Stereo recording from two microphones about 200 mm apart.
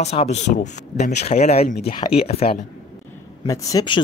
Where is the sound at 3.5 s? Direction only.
15° left (ahead or behind).